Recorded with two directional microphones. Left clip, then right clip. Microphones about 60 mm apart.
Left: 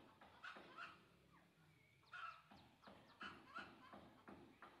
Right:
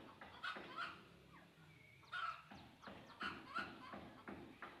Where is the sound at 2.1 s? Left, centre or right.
Right.